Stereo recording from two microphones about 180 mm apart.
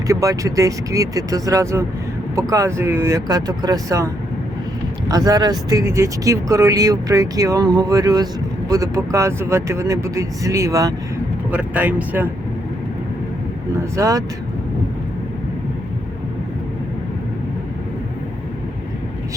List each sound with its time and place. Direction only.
0.1 s speech: 20° right (ahead or behind)
13.7 s speech: 15° right (ahead or behind)